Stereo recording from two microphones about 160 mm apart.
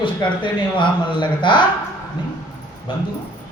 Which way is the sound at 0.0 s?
30° left (ahead or behind).